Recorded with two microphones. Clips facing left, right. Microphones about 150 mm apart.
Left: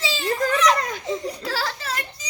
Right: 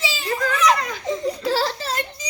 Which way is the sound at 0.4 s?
40° left (ahead or behind).